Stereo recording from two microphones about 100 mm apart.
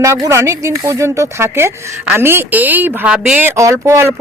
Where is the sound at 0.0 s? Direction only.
30° right (ahead or behind).